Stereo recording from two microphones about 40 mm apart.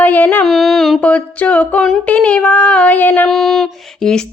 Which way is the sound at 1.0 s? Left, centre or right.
Left.